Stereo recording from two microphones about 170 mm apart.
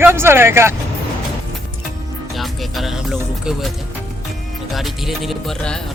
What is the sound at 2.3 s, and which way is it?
Music, centre (ahead or behind).